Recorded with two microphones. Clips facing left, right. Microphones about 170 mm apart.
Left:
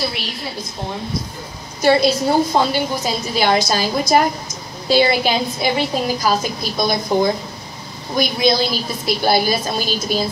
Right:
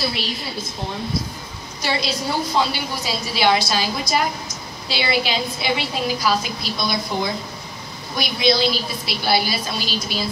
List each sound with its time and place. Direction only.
1.8 s a woman's voice: 50° left (ahead or behind)